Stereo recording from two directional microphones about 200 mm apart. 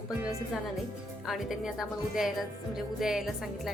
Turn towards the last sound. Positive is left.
turn(degrees=0)  # may be behind; listen again after turning